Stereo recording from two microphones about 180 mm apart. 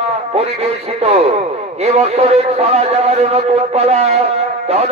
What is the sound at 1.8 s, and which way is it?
A man's voice, 35° right (ahead or behind).